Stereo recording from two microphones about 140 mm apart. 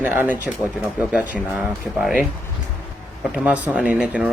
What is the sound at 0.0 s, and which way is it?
Speech, 15° right (ahead or behind).